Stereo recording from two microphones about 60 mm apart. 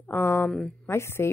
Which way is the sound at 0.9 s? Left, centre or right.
Left.